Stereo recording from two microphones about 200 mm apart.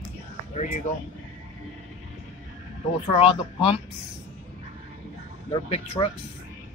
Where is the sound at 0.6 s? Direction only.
35° left (ahead or behind).